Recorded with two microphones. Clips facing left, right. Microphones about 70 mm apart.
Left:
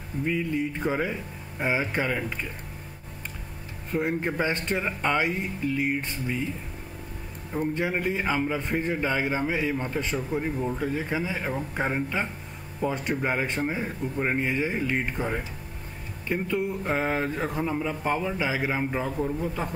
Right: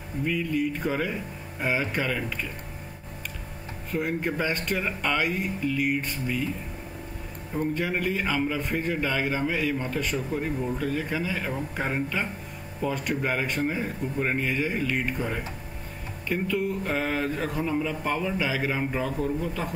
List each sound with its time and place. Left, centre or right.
0.3 s speech: left
3.9 s speech: left
7.7 s a man's voice: left